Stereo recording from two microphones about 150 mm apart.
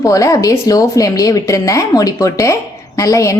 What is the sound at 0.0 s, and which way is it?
A woman's voice, 20° left (ahead or behind).